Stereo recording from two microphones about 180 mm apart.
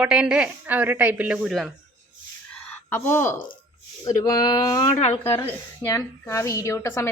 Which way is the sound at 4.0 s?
20° left (ahead or behind).